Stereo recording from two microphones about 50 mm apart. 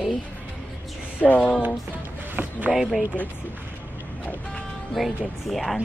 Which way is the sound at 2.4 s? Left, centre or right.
Right.